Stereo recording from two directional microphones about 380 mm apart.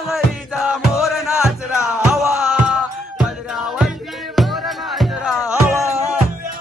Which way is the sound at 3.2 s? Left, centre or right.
Centre.